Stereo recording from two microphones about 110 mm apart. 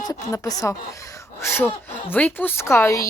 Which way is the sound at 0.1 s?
30° left (ahead or behind).